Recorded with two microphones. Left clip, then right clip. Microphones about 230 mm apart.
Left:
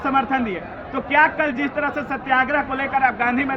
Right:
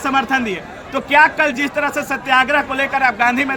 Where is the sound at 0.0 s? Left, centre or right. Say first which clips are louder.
Right 3 dB; right.